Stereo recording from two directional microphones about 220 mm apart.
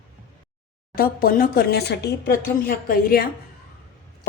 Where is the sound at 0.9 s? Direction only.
40° left (ahead or behind).